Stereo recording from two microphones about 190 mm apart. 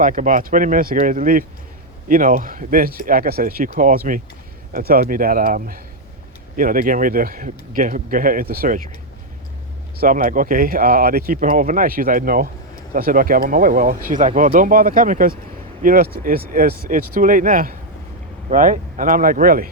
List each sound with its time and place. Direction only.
0.0 s speech: 45° right (ahead or behind)
10.0 s speech: 45° right (ahead or behind)